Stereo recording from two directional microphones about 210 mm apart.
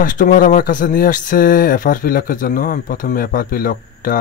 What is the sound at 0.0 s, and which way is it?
Speech, 40° left (ahead or behind).